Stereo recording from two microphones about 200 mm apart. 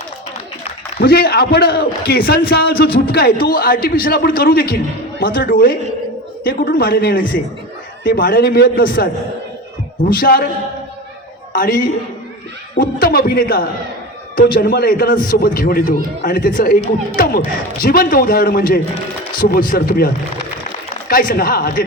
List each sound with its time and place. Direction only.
0.9 s a man's voice: 50° left (ahead or behind)
11.5 s a man's voice: 45° left (ahead or behind)
21.1 s a man's voice: 45° left (ahead or behind)